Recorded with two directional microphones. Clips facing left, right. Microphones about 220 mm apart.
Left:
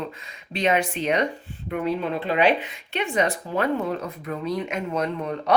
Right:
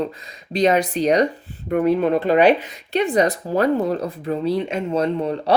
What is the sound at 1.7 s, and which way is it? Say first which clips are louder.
Speech: right 8 dB; 50° right (ahead or behind).